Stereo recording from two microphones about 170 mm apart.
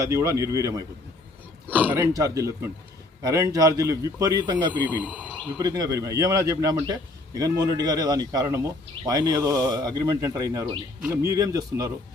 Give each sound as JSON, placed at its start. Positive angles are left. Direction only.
{"t": 0.0, "sound": "speech", "side_deg": -20}
{"t": 4.9, "sound": "speech", "side_deg": -10}
{"t": 5.5, "sound": "speech", "side_deg": -20}